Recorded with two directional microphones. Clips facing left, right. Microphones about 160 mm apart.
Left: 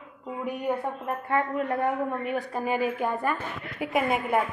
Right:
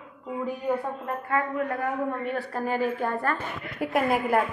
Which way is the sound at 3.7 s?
Centre (ahead or behind).